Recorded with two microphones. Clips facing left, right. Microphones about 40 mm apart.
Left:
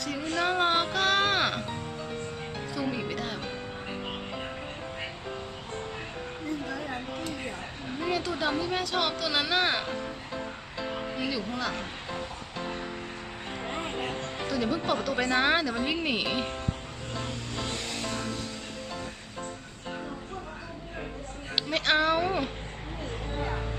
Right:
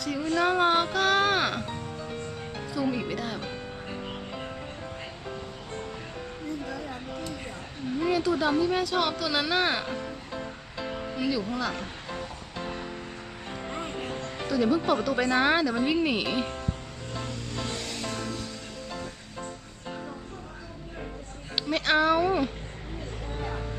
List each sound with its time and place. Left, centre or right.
0.3 s music: centre
6.7 s a sound: left
7.9 s a sound: centre
10.9 s music: centre
13.7 s music: left
14.3 s speech: centre
18.0 s music: centre
21.5 s speech: centre
23.4 s music: centre